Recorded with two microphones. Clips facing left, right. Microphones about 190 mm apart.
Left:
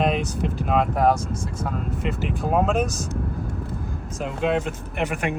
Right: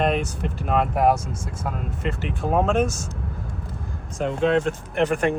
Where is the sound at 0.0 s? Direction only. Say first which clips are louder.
Even; centre (ahead or behind).